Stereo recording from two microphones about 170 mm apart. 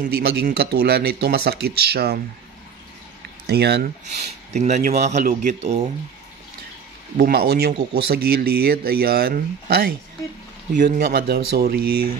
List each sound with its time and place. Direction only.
0.0 s speech: 65° right (ahead or behind)
3.4 s speech: 70° right (ahead or behind)
4.0 s speech: 40° right (ahead or behind)
7.2 s speech: 65° right (ahead or behind)